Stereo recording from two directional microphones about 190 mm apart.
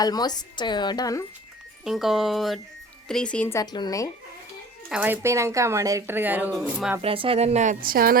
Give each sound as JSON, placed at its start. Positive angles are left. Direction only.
{"t": 0.0, "sound": "speech", "side_deg": 20}
{"t": 1.8, "sound": "speech", "side_deg": 0}
{"t": 3.6, "sound": "speech", "side_deg": 20}
{"t": 4.9, "sound": "speech", "side_deg": -10}
{"t": 7.0, "sound": "a woman's voice", "side_deg": -30}